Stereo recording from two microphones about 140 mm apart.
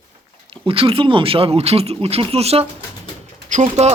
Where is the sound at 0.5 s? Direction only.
40° right (ahead or behind).